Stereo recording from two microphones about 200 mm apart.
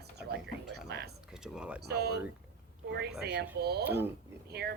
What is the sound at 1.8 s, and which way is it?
Speech, 55° right (ahead or behind).